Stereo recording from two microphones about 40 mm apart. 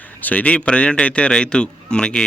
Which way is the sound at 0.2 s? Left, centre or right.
Left.